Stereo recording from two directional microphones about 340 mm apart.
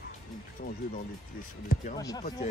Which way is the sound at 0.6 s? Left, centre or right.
Left.